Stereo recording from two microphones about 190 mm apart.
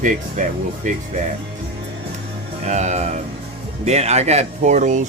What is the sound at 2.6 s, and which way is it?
Speech, 40° right (ahead or behind).